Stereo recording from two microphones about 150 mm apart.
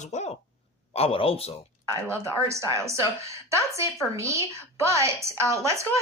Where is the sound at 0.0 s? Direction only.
50° left (ahead or behind).